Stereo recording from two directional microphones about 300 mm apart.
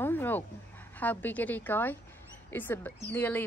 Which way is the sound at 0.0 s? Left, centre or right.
Centre.